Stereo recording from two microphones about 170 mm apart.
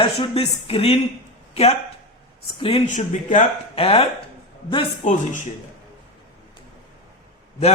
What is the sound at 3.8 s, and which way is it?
Speech, 35° left (ahead or behind).